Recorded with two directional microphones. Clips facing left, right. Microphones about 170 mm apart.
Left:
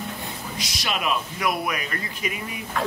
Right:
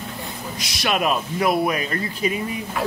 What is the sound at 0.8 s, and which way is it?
Speech, 45° right (ahead or behind).